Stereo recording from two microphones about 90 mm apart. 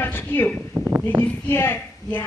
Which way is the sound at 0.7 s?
30° right (ahead or behind).